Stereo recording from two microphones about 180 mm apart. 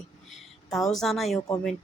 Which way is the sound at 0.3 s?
Centre (ahead or behind).